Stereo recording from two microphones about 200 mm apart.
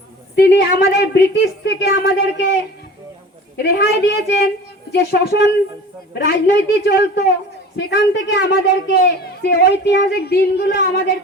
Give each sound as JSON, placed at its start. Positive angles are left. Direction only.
{"t": 0.3, "sound": "a man's voice", "side_deg": 55}
{"t": 3.6, "sound": "a man's voice", "side_deg": 60}